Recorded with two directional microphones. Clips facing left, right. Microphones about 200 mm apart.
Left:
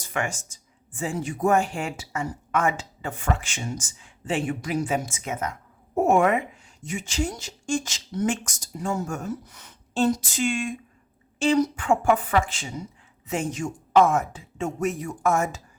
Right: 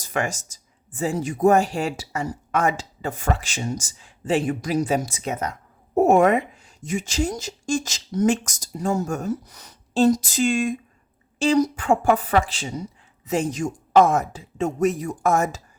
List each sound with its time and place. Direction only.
0.0 s speech: 40° right (ahead or behind)